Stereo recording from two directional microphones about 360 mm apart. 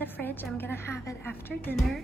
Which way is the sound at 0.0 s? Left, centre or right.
Centre.